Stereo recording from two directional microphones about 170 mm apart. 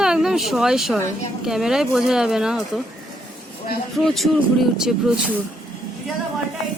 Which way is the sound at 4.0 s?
Centre (ahead or behind).